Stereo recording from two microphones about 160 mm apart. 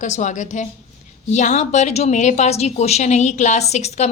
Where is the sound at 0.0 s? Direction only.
50° left (ahead or behind).